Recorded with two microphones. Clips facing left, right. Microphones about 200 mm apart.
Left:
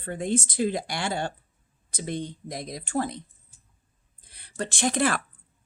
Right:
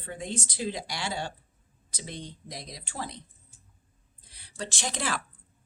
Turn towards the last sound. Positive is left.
turn(degrees=55)  # may be behind; listen again after turning